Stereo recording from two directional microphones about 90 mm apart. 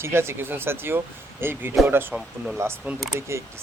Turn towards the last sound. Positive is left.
turn(degrees=-25)  # may be behind; listen again after turning